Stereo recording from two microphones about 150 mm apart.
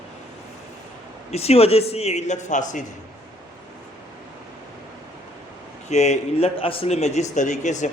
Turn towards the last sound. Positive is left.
turn(degrees=55)  # may be behind; listen again after turning